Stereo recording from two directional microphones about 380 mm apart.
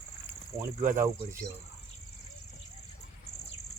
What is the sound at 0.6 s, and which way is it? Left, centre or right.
Speech, centre.